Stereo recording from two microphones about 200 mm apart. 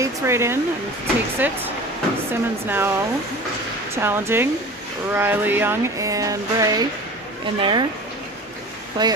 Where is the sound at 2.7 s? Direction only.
10° right (ahead or behind).